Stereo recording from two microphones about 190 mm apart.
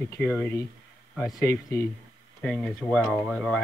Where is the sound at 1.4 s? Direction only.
15° left (ahead or behind).